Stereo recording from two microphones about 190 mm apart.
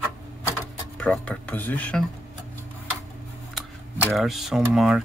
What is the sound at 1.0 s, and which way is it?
Speech, 5° left (ahead or behind).